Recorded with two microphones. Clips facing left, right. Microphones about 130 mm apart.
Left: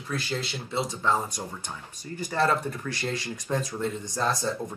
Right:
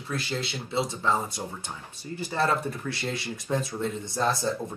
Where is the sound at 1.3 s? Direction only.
15° left (ahead or behind).